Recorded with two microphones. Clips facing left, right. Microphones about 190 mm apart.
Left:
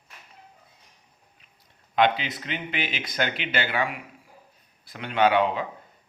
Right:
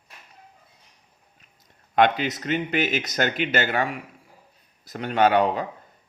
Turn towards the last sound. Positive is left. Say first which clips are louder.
# right 2 dB
turn(degrees=-45)  # may be behind; listen again after turning